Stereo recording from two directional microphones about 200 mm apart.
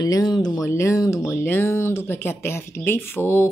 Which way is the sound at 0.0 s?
20° left (ahead or behind).